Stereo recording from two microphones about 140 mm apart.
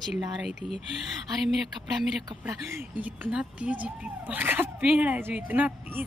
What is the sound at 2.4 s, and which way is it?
A woman's voice, 15° right (ahead or behind).